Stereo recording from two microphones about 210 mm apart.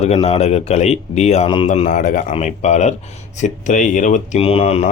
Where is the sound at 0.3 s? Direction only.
30° left (ahead or behind).